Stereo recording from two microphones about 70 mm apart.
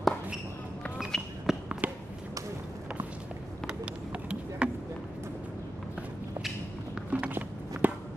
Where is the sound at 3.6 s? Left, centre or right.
Centre.